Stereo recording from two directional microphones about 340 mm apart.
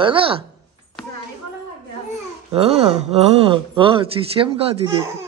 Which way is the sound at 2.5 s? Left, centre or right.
Centre.